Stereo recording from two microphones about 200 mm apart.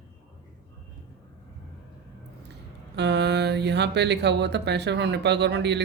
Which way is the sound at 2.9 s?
60° right (ahead or behind).